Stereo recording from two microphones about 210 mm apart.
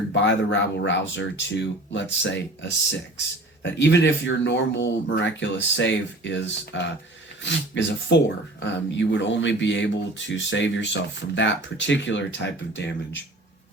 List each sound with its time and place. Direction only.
0.1 s speech: 60° left (ahead or behind)